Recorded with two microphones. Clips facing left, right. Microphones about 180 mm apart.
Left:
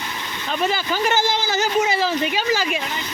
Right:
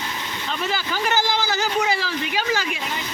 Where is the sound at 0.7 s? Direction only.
20° left (ahead or behind).